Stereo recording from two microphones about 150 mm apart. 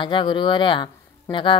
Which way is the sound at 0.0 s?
30° left (ahead or behind).